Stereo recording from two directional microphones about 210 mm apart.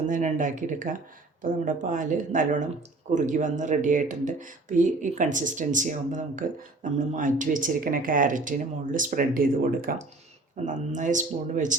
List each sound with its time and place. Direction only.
0.1 s speech: 35° right (ahead or behind)